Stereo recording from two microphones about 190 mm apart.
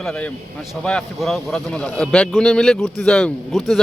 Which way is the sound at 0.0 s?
5° left (ahead or behind).